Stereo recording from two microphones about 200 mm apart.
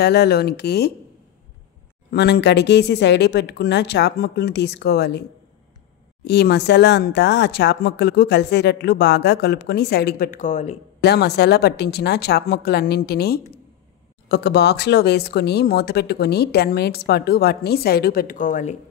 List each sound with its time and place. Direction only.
0.0 s speech: 55° left (ahead or behind)
2.0 s speech: 55° left (ahead or behind)
6.2 s speech: 55° left (ahead or behind); by 10.8 s 35° left (ahead or behind)
11.0 s speech: 55° left (ahead or behind); by 18.8 s 40° left (ahead or behind)